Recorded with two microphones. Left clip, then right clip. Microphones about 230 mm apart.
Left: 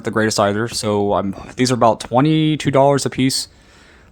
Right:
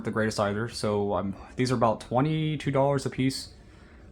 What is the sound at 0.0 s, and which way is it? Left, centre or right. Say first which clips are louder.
Speech: left 11 dB; left.